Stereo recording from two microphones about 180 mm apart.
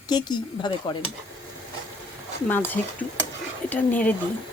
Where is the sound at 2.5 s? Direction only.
10° left (ahead or behind).